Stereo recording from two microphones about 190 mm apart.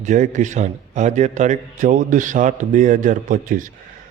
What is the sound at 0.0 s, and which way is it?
A man's voice, 40° right (ahead or behind).